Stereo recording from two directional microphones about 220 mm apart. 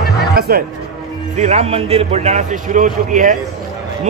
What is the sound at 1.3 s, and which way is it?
A man's voice, 30° right (ahead or behind).